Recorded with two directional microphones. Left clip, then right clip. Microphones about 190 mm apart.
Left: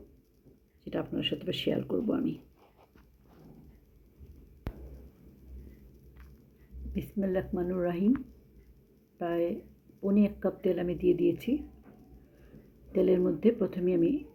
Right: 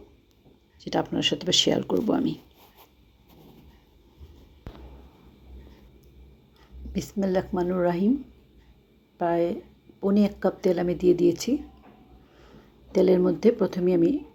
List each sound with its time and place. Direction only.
0.9 s speech: 15° right (ahead or behind)
6.9 s speech: centre (ahead or behind)
9.1 s a woman's voice: 5° right (ahead or behind)
12.9 s speech: 5° right (ahead or behind)